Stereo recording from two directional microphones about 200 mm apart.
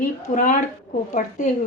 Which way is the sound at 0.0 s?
40° left (ahead or behind).